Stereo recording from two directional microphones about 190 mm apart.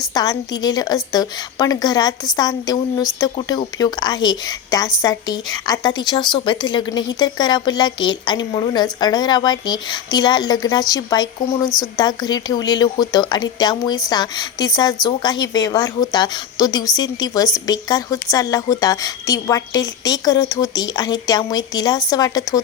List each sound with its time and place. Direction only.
0.1 s a woman's voice: 20° left (ahead or behind)